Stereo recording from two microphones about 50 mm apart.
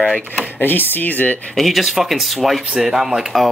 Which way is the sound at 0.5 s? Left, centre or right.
Left.